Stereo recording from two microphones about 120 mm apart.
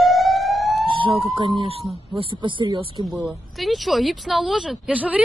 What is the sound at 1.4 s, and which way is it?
Speech, 45° right (ahead or behind).